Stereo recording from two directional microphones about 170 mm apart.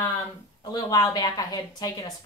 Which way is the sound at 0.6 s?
25° left (ahead or behind).